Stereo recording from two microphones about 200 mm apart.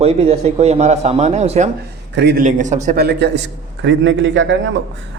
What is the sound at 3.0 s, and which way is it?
Speech, 55° right (ahead or behind).